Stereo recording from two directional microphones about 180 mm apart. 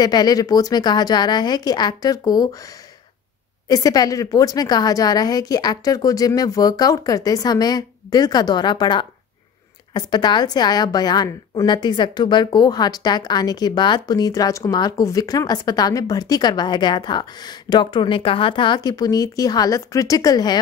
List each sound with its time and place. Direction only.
0.0 s a woman's voice: 20° left (ahead or behind)
3.6 s a woman's voice: 20° left (ahead or behind)